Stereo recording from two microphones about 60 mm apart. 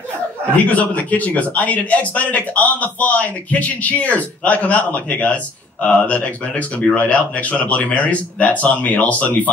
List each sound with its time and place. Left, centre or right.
0.7 s a man's voice: left